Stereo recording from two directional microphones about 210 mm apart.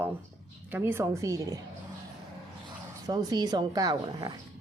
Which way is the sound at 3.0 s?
20° right (ahead or behind).